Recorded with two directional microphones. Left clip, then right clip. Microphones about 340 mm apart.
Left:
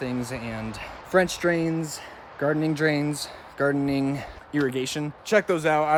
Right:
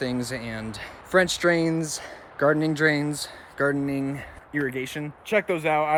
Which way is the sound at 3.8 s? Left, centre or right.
Centre.